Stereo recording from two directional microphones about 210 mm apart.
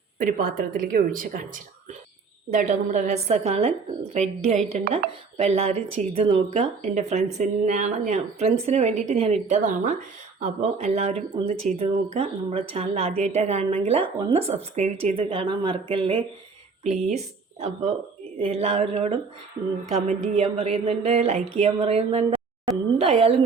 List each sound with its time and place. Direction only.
0.2 s speech: 40° right (ahead or behind)